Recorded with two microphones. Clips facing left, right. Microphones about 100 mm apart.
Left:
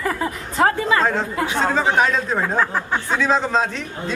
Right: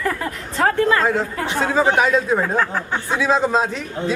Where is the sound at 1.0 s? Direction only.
5° right (ahead or behind).